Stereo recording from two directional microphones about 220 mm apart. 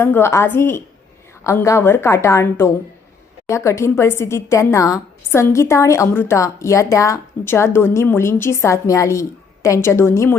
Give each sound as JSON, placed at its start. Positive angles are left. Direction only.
{"t": 0.0, "sound": "a woman's voice", "side_deg": 10}